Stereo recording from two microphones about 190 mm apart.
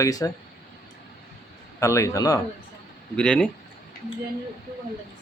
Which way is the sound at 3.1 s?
5° left (ahead or behind).